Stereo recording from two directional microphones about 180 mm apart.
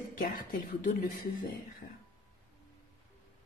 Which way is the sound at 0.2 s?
50° left (ahead or behind).